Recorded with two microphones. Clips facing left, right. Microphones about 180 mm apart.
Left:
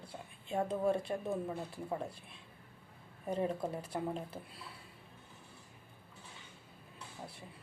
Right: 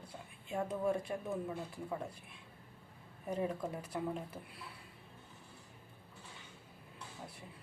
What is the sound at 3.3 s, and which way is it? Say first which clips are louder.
Speech: left 2 dB; 30° left (ahead or behind).